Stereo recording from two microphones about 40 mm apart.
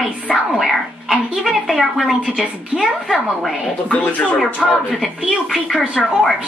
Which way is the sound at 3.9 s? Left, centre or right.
Left.